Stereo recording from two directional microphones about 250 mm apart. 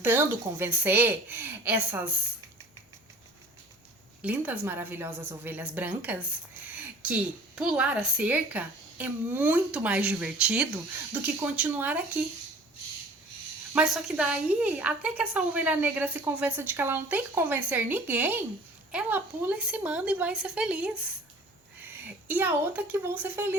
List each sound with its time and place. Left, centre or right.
0.0 s a woman's voice: centre
4.2 s a woman's voice: centre
13.7 s a woman's voice: centre
22.3 s a woman's voice: centre